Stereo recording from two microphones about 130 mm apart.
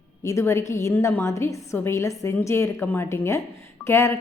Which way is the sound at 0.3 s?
20° left (ahead or behind).